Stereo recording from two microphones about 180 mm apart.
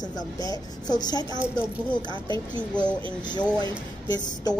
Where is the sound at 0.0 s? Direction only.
20° left (ahead or behind).